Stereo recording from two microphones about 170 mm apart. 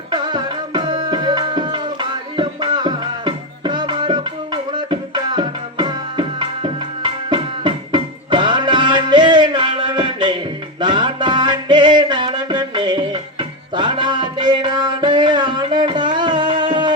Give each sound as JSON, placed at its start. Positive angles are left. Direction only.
{"t": 0.1, "sound": "music", "side_deg": -25}